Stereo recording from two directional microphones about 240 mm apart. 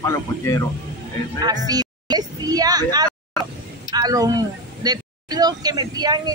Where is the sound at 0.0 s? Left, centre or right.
Centre.